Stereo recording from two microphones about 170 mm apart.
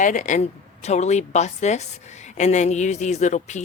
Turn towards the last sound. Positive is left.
turn(degrees=45)  # may be behind; listen again after turning